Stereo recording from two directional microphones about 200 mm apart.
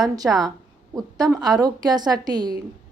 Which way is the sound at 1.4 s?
20° right (ahead or behind).